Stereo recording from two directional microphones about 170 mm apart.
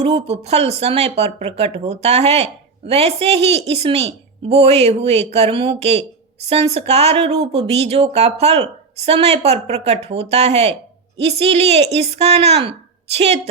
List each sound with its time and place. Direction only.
0.0 s speech: 35° right (ahead or behind)